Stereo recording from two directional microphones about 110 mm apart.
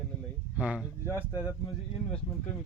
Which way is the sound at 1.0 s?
25° left (ahead or behind).